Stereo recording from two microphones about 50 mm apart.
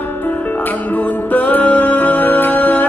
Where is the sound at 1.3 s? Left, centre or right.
Left.